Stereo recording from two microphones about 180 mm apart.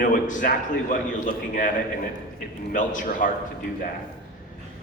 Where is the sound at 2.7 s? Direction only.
45° left (ahead or behind).